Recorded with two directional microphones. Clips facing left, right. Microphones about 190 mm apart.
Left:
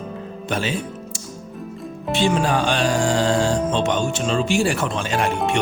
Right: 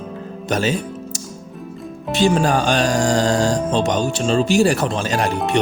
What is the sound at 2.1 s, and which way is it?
Speech, 40° right (ahead or behind).